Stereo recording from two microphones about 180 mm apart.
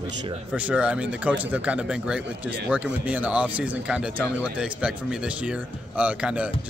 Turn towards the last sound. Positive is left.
turn(degrees=-5)  # may be behind; listen again after turning